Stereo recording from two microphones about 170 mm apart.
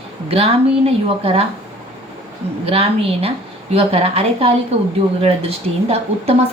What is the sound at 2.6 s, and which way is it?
A woman's voice, 35° right (ahead or behind).